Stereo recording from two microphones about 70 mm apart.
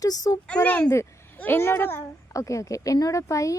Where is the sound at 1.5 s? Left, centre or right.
Left.